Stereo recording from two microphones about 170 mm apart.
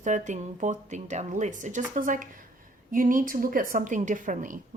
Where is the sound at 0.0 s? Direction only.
45° right (ahead or behind).